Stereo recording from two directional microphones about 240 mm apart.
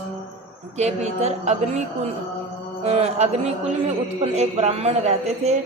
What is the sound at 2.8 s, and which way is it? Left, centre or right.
A man's voice, right.